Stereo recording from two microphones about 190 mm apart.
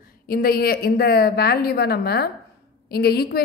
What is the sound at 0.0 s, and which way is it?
A woman's voice, 50° left (ahead or behind).